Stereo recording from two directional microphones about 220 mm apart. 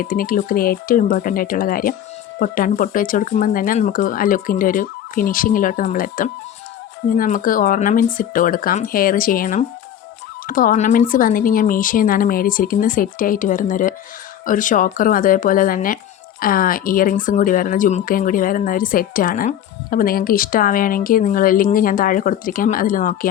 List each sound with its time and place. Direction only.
0.0 s speech: 40° left (ahead or behind)